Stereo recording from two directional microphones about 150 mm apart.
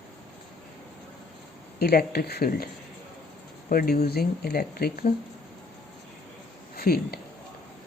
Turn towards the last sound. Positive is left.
turn(degrees=90)